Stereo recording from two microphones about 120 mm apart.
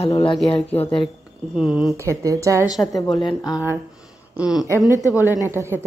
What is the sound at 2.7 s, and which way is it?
Speech, 30° left (ahead or behind).